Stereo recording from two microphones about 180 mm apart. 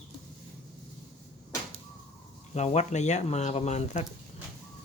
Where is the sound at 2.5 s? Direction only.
40° left (ahead or behind).